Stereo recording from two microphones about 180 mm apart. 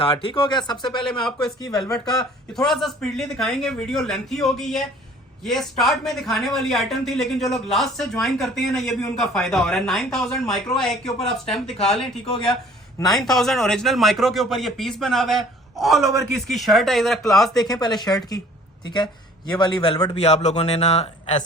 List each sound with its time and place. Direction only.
0.0 s speech: 25° left (ahead or behind)
1.2 s speech: 5° left (ahead or behind)
13.1 s speech: centre (ahead or behind)
17.6 s speech: 25° left (ahead or behind)
19.5 s speech: 25° left (ahead or behind)